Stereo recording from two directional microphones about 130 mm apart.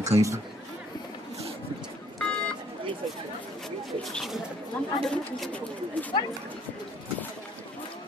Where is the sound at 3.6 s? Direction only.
Centre (ahead or behind).